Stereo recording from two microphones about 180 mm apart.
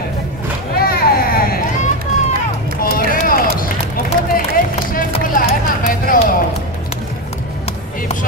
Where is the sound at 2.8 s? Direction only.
55° left (ahead or behind).